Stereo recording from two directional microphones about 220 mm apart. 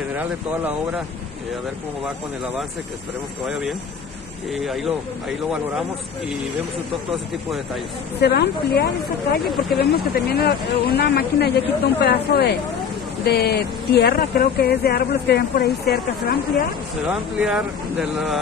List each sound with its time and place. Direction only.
0.2 s speech: 10° right (ahead or behind)
4.6 s speech: centre (ahead or behind)
8.2 s speech: 45° left (ahead or behind)
17.4 s speech: 5° right (ahead or behind)